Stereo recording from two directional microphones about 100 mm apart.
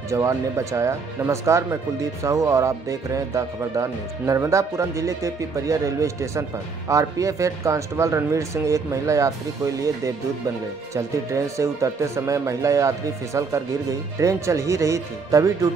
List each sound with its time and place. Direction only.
0.1 s speech: 30° right (ahead or behind)